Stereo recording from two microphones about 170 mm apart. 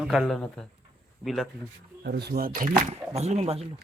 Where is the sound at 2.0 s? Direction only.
70° right (ahead or behind); by 3.7 s 35° right (ahead or behind).